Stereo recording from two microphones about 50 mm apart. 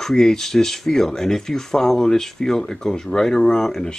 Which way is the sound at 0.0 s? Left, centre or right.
Centre.